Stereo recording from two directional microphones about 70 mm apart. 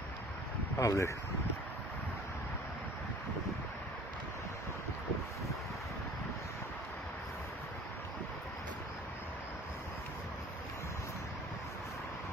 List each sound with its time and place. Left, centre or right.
0.7 s speech: left